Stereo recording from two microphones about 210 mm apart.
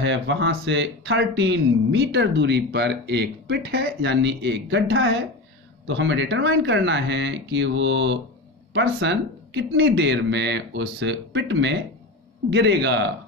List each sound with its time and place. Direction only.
0.0 s speech: 60° right (ahead or behind)